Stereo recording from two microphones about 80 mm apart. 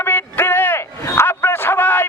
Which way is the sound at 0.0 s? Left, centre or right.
Left.